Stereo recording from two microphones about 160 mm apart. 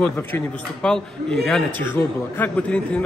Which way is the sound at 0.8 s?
5° left (ahead or behind).